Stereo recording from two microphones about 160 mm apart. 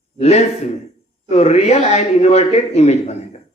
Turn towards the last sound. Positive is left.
turn(degrees=40)  # may be behind; listen again after turning